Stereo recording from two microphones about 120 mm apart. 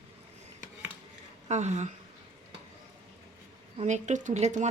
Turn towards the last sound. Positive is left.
turn(degrees=-75)  # may be behind; listen again after turning